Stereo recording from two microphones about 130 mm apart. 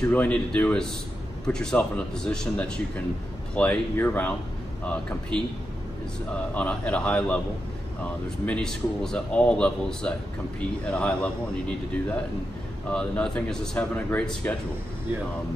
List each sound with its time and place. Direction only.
0.1 s speech: 10° left (ahead or behind)
6.5 s speech: 10° left (ahead or behind)
12.9 s speech: 10° left (ahead or behind)